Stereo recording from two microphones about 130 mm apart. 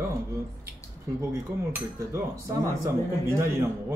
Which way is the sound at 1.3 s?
25° right (ahead or behind).